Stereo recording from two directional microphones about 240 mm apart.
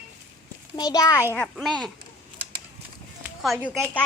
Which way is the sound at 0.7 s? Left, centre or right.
Centre.